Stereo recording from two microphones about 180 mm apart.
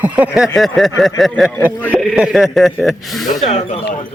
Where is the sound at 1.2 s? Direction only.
5° left (ahead or behind).